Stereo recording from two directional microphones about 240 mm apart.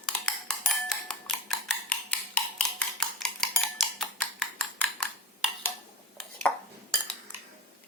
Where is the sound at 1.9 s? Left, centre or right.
Centre.